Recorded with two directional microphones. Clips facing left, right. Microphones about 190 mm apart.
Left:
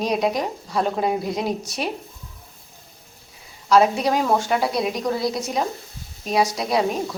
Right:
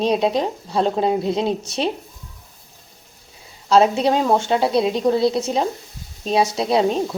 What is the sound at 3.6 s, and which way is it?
Speech, 25° right (ahead or behind).